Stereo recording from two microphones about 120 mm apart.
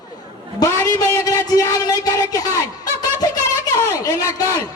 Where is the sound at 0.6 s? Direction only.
25° left (ahead or behind).